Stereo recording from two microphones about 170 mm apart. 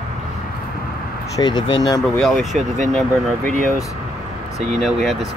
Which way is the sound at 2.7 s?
45° right (ahead or behind).